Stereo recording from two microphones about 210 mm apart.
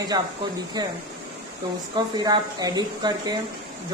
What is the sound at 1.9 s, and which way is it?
Speech, 20° right (ahead or behind).